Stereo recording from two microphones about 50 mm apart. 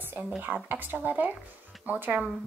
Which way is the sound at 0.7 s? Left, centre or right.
Right.